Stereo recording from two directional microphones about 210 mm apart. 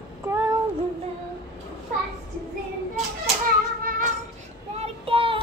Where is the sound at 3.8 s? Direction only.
40° right (ahead or behind).